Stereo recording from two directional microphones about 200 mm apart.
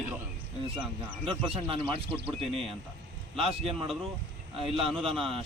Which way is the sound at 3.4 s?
30° right (ahead or behind).